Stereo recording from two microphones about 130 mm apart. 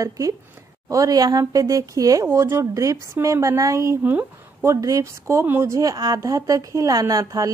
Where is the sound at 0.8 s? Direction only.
25° right (ahead or behind).